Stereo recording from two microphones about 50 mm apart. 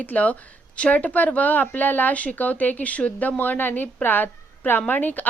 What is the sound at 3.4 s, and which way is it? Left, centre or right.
A woman's voice, left.